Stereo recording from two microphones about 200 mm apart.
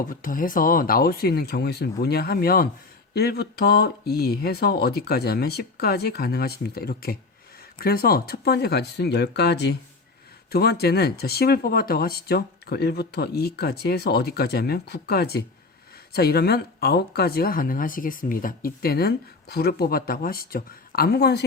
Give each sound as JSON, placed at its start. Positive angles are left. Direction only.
{"t": 0.1, "sound": "speech", "side_deg": 45}